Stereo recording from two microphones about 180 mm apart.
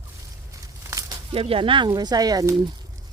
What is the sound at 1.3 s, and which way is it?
Speech, 30° right (ahead or behind).